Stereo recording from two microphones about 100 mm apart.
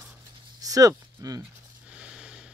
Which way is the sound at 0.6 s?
35° right (ahead or behind).